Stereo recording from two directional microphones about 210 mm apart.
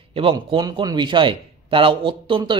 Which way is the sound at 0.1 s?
25° right (ahead or behind).